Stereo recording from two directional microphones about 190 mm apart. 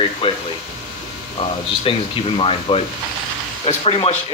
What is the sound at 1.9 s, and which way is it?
Speech, 30° left (ahead or behind).